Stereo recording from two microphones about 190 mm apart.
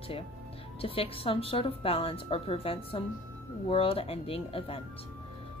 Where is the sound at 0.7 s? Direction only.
30° left (ahead or behind).